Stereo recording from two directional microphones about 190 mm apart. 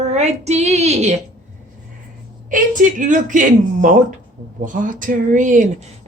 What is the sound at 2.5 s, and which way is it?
A woman's voice, 45° right (ahead or behind).